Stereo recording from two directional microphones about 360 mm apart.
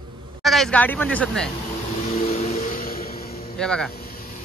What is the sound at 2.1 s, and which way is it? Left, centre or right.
Vehicle, centre.